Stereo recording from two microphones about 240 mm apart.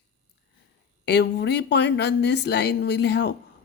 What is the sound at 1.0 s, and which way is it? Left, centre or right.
Speech, left.